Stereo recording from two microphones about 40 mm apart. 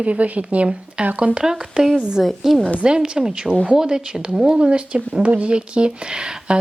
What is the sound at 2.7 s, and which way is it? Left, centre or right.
Speech, right.